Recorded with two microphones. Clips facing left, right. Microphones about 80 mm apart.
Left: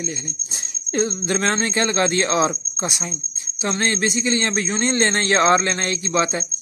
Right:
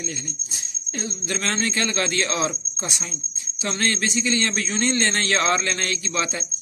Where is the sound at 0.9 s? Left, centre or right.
Left.